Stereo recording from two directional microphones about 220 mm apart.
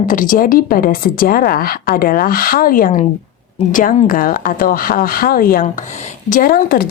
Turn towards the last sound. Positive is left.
turn(degrees=40)  # may be behind; listen again after turning